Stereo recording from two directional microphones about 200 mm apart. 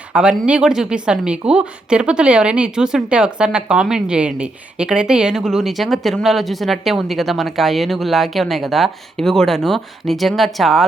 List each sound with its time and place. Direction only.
0.1 s a woman's voice: 5° right (ahead or behind)